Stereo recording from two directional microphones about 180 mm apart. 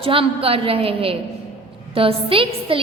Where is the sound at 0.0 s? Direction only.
30° right (ahead or behind).